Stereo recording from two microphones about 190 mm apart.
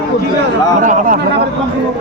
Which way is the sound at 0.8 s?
40° right (ahead or behind).